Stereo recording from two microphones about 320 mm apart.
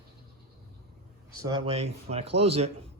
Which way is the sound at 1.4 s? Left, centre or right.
Centre.